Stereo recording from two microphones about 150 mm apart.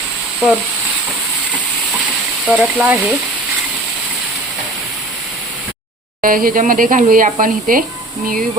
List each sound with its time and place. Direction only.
2.5 s speech: 5° right (ahead or behind)
6.2 s speech: 70° right (ahead or behind)